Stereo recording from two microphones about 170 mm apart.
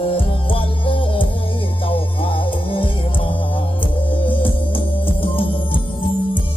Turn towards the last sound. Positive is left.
turn(degrees=30)  # may be behind; listen again after turning